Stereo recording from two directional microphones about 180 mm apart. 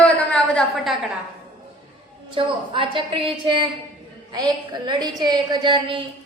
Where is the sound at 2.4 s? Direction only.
30° right (ahead or behind).